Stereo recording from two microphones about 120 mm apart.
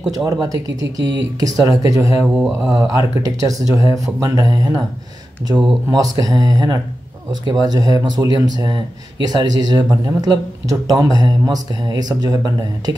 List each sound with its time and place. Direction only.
0.1 s speech: 30° right (ahead or behind)
2.2 s speech: 5° right (ahead or behind)
2.8 s speech: 30° right (ahead or behind)
6.1 s speech: 30° right (ahead or behind)